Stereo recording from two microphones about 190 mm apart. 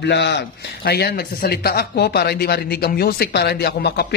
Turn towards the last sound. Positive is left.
turn(degrees=60)  # may be behind; listen again after turning